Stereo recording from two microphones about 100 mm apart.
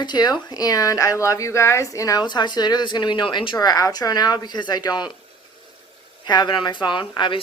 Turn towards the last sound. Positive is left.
turn(degrees=55)  # may be behind; listen again after turning